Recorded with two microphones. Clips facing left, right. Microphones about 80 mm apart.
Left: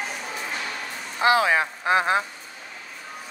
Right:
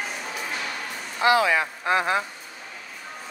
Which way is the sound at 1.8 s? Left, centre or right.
Centre.